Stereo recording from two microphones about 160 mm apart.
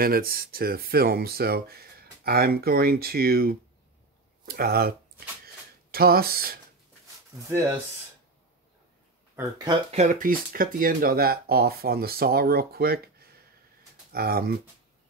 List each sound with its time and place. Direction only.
0.0 s speech: 70° right (ahead or behind)
7.4 s speech: 15° right (ahead or behind)
9.4 s speech: 25° right (ahead or behind)
9.8 s speech: 50° right (ahead or behind); by 14.6 s 70° right (ahead or behind)